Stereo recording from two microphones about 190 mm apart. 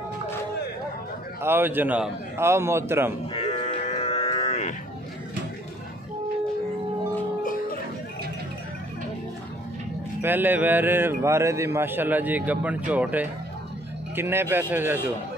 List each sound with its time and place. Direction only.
1.4 s a man's voice: 10° right (ahead or behind)
3.3 s cattle: 35° left (ahead or behind)
10.2 s a man's voice: 10° right (ahead or behind)